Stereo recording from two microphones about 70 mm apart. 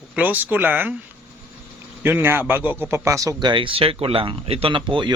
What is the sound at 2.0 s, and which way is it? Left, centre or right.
A man's voice, right.